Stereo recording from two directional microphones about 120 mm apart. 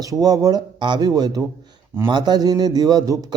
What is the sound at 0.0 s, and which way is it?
A man's voice, 30° right (ahead or behind).